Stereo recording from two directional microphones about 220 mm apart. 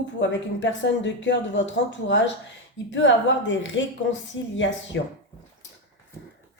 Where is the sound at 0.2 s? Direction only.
55° left (ahead or behind).